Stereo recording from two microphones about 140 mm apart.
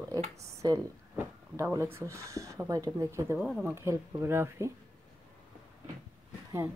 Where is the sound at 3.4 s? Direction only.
5° right (ahead or behind).